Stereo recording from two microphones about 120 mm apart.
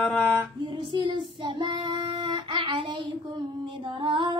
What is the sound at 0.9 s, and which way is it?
Child singing, 40° right (ahead or behind).